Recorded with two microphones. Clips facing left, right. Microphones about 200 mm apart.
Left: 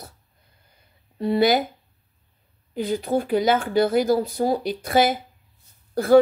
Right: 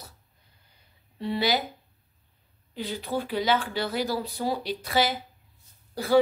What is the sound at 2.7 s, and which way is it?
Speech, 45° left (ahead or behind).